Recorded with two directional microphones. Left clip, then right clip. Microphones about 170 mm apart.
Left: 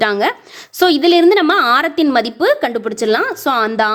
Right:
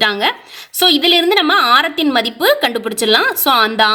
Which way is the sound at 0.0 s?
35° left (ahead or behind).